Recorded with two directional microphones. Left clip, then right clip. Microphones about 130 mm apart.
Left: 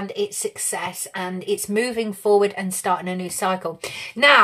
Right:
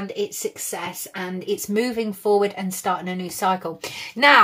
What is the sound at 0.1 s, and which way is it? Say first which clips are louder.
A woman's voice: even; 40° left (ahead or behind).